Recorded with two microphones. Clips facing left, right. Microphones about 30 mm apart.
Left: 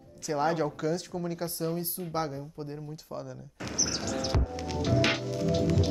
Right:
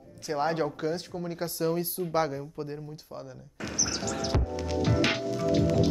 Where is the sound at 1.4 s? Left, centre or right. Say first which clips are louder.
Right 8 dB; right.